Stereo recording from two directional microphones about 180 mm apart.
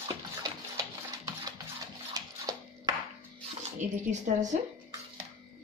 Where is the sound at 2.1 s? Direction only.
20° right (ahead or behind).